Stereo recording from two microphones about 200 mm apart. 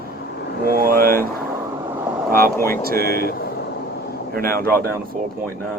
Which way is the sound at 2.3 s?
45° right (ahead or behind).